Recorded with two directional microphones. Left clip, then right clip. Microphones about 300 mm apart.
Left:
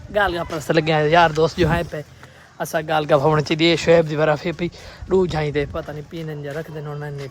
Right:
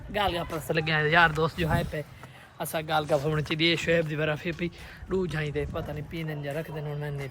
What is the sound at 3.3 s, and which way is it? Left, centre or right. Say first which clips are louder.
Speech: left 9 dB; centre.